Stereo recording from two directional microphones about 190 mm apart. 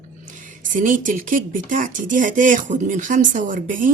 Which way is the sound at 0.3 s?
45° right (ahead or behind).